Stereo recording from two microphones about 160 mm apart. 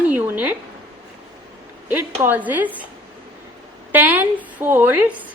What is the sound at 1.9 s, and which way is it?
Speech, 10° right (ahead or behind).